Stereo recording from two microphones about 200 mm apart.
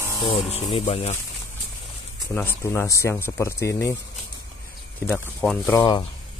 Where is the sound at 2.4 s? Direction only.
10° left (ahead or behind).